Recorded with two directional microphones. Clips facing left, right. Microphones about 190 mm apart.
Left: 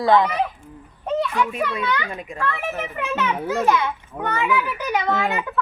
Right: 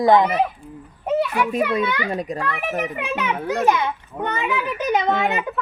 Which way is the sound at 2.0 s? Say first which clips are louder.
Right 7 dB; 35° right (ahead or behind).